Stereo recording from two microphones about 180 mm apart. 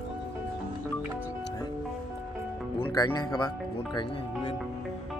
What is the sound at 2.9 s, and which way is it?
Speech, 25° left (ahead or behind).